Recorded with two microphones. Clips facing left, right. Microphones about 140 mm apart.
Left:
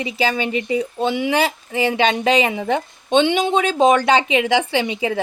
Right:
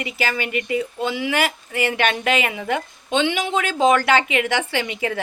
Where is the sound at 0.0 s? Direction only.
20° left (ahead or behind).